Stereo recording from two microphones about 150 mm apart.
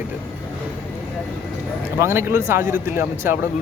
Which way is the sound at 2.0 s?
15° right (ahead or behind).